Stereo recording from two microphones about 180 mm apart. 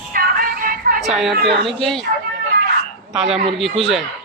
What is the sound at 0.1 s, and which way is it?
Music, 55° right (ahead or behind).